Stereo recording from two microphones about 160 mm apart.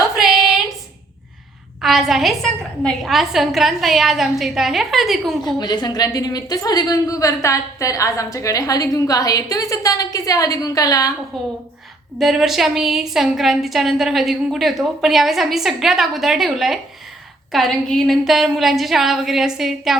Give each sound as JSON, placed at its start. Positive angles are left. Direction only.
{"t": 0.2, "sound": "a sound", "side_deg": 0}
{"t": 1.8, "sound": "a woman's voice", "side_deg": 0}
{"t": 5.4, "sound": "a woman's voice", "side_deg": 25}
{"t": 11.3, "sound": "a woman's voice", "side_deg": 0}